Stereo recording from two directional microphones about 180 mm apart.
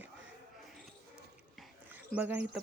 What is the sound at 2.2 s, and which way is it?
Speech, 10° right (ahead or behind).